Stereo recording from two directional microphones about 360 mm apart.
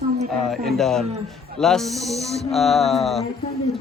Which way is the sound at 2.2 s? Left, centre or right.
Centre.